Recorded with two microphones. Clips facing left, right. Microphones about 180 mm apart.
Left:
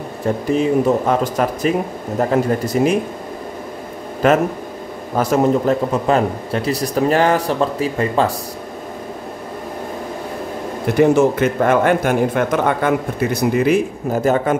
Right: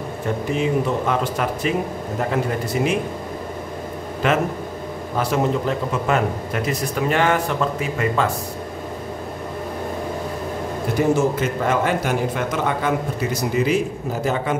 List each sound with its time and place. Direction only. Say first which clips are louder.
0.6 s speech: left 6 dB; 40° left (ahead or behind)
4.2 s speech: left 6 dB; 40° left (ahead or behind)
11.0 s a man's voice: left 6 dB; 65° left (ahead or behind)